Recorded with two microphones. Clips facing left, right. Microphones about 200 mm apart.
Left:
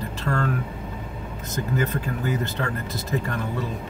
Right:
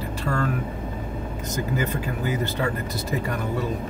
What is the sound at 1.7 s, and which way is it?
Speech, 5° right (ahead or behind).